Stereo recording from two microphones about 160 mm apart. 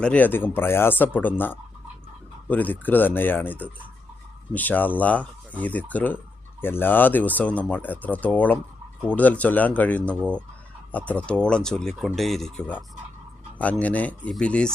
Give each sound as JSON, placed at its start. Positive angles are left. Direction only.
{"t": 0.0, "sound": "speech", "side_deg": 10}